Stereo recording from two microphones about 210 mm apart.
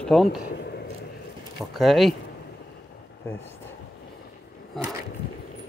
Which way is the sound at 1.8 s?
Centre (ahead or behind).